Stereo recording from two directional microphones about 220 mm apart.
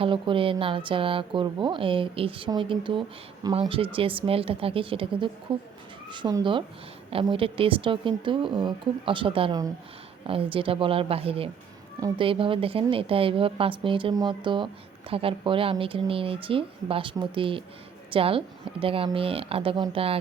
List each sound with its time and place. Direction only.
0.0 s speech: 25° right (ahead or behind)